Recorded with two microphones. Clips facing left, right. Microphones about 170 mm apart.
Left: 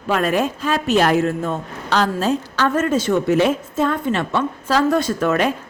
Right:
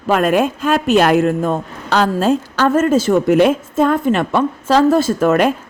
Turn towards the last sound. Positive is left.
turn(degrees=-50)  # may be behind; listen again after turning